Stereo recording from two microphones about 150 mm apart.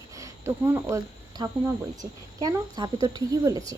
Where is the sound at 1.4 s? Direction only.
30° right (ahead or behind).